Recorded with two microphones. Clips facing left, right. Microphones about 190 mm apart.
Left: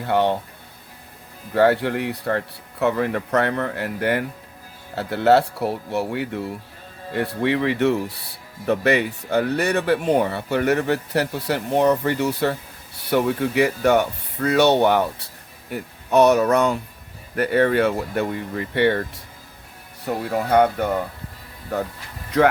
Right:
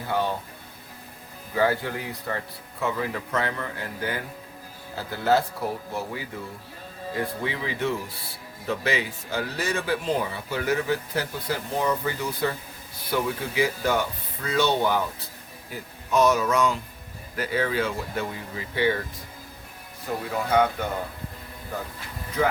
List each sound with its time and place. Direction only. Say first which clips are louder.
0.1 s speech: left 7 dB; 70° left (ahead or behind)
1.5 s speech: left 7 dB; 70° left (ahead or behind)
20.3 s speech: left 5 dB; 55° left (ahead or behind)